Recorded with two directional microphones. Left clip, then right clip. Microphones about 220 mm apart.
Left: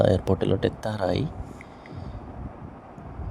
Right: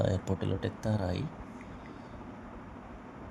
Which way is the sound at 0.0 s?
25° left (ahead or behind).